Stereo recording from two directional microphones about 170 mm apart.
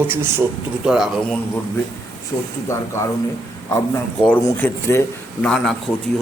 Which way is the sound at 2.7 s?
15° left (ahead or behind).